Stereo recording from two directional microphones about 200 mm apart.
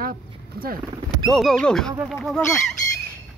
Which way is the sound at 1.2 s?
Centre (ahead or behind).